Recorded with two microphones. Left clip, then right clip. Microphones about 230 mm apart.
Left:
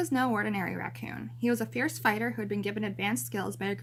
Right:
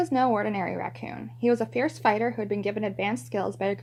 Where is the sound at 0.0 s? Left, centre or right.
Centre.